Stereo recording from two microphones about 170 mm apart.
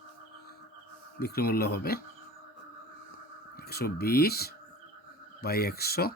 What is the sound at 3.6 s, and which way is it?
Speech, 65° left (ahead or behind).